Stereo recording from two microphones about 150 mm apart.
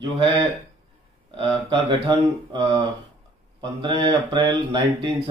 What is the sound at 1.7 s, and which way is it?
Speech, 30° right (ahead or behind).